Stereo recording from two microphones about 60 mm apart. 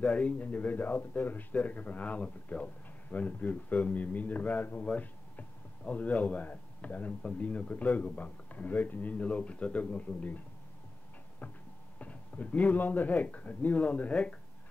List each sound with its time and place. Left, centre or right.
0.0 s speech: left
12.0 s speech: left